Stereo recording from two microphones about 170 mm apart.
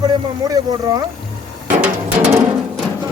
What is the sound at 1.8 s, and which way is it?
Music, 5° right (ahead or behind).